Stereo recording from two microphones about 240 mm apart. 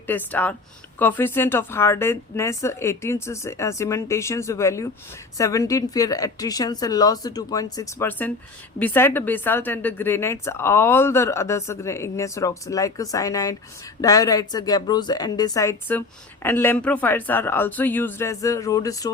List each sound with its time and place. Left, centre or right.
0.1 s a woman's voice: centre